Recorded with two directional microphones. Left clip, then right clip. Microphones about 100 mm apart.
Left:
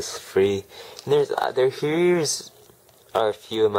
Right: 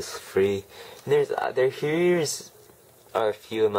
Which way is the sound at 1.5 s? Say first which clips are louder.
Left 2 dB; 10° left (ahead or behind).